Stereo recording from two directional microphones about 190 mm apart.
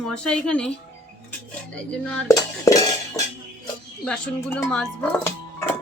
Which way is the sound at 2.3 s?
20° left (ahead or behind).